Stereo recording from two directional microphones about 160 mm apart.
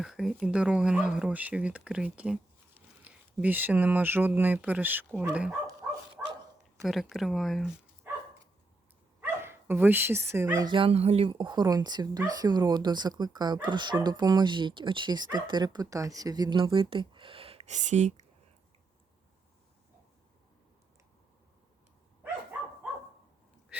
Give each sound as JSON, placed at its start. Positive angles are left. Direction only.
{"t": 0.0, "sound": "speech", "side_deg": -5}
{"t": 6.8, "sound": "speech", "side_deg": 0}
{"t": 9.2, "sound": "speech", "side_deg": -15}